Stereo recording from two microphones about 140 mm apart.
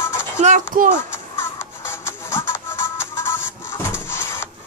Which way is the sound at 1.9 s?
20° left (ahead or behind).